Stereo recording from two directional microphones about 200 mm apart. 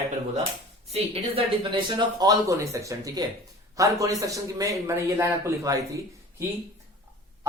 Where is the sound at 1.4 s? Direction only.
30° right (ahead or behind).